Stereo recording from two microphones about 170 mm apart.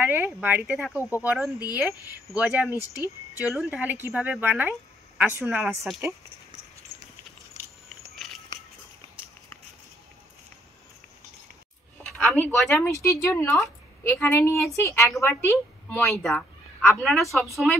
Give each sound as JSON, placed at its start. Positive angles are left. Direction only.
{"t": 0.0, "sound": "a woman's voice", "side_deg": -10}
{"t": 2.7, "sound": "speech", "side_deg": 20}
{"t": 3.5, "sound": "a woman's voice", "side_deg": -5}
{"t": 12.0, "sound": "speech", "side_deg": 5}